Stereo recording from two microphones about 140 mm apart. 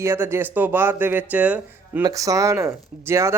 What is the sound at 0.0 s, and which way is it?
Speech, 20° right (ahead or behind).